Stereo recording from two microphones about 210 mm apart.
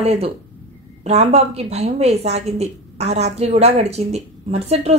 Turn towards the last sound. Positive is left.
turn(degrees=-30)  # may be behind; listen again after turning